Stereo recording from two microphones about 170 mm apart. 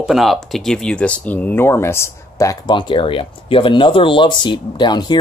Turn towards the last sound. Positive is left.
turn(degrees=25)  # may be behind; listen again after turning